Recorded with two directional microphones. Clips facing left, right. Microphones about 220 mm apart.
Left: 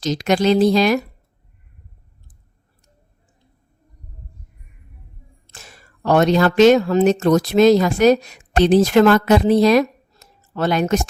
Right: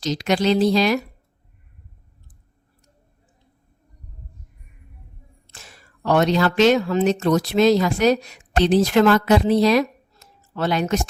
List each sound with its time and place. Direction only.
0.0 s speech: 50° left (ahead or behind)
5.5 s speech: 45° left (ahead or behind)